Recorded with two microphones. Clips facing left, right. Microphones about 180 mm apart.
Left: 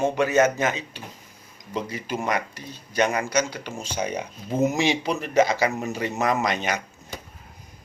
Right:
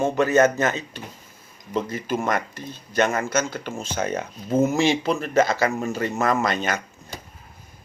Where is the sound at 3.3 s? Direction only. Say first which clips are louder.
Even; 50° right (ahead or behind).